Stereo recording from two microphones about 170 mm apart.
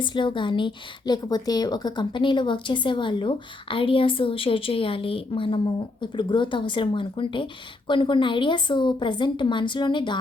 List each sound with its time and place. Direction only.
0.0 s a woman's voice: 30° left (ahead or behind)